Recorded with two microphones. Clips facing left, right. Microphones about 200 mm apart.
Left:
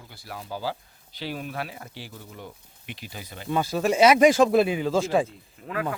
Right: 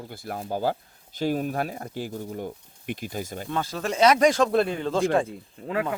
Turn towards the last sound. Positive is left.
turn(degrees=-25)  # may be behind; listen again after turning